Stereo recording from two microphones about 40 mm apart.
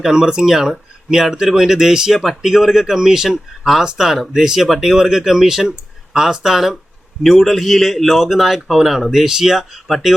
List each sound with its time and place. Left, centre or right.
0.0 s a man's voice: centre